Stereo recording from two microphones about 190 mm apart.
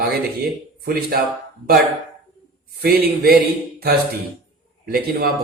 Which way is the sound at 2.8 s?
55° right (ahead or behind).